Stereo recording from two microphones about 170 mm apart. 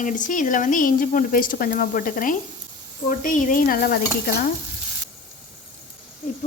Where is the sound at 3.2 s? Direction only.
50° left (ahead or behind).